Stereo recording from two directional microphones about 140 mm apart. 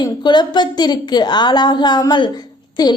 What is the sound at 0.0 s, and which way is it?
A woman's voice, 30° left (ahead or behind).